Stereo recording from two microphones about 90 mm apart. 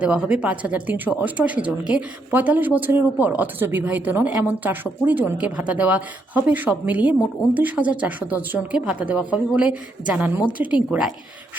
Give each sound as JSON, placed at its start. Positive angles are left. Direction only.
{"t": 0.0, "sound": "speech", "side_deg": -15}